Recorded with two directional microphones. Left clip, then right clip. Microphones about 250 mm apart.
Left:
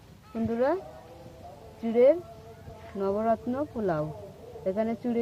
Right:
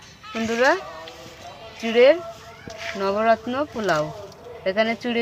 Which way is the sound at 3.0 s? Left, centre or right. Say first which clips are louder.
Right 5 dB; right.